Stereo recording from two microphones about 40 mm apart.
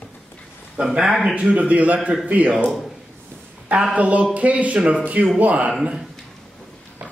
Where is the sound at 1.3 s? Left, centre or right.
Right.